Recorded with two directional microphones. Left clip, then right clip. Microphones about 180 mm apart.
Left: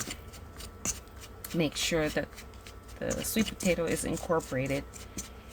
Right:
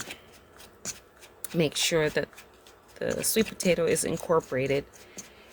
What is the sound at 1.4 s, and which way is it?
Speech, 50° right (ahead or behind).